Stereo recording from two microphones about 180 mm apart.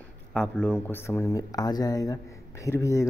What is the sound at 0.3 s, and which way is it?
Speech, 5° left (ahead or behind).